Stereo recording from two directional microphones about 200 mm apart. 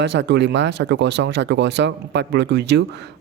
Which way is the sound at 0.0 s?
60° right (ahead or behind).